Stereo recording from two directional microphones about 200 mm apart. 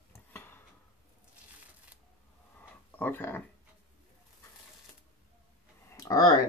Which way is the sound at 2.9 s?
10° left (ahead or behind).